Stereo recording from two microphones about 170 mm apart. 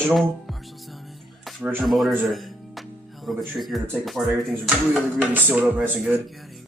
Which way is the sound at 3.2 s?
Centre (ahead or behind).